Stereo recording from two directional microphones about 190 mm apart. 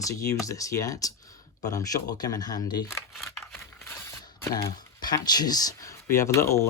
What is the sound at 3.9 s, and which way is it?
Speech, 15° left (ahead or behind).